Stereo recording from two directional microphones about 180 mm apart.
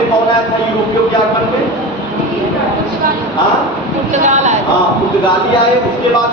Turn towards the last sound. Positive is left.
turn(degrees=-40)  # may be behind; listen again after turning